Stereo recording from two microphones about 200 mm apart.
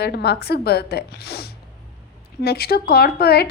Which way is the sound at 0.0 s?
55° left (ahead or behind).